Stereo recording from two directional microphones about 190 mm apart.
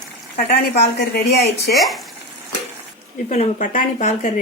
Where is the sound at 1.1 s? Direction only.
55° left (ahead or behind).